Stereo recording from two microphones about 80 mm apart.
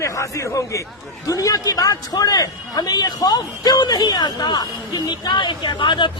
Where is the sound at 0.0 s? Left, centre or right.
Left.